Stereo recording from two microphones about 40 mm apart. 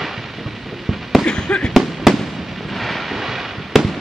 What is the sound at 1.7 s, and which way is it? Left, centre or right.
Fireworks, centre.